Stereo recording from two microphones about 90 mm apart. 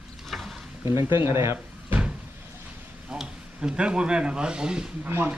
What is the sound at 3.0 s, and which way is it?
Speech, 10° right (ahead or behind).